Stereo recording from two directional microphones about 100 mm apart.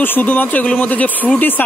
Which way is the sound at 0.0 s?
20° left (ahead or behind).